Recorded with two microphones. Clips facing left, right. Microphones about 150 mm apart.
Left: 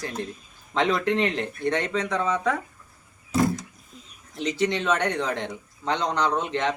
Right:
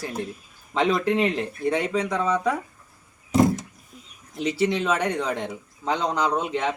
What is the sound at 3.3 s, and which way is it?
Vehicle, 20° right (ahead or behind).